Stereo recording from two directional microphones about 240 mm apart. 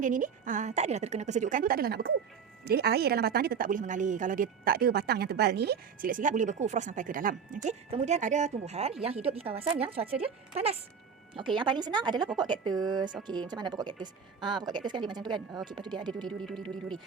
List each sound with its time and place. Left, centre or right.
0.0 s a woman's voice: right
16.1 s speech: centre